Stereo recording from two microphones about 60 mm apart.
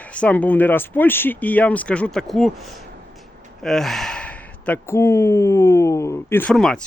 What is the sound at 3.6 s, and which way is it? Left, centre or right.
Speech, centre.